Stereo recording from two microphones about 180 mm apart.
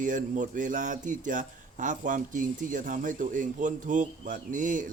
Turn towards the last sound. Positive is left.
turn(degrees=-45)  # may be behind; listen again after turning